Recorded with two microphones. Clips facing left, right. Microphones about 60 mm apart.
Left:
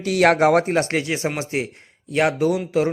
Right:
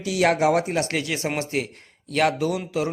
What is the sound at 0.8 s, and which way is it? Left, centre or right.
A man's voice, left.